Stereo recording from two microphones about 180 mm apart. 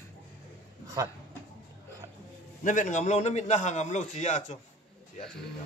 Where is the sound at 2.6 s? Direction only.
45° left (ahead or behind).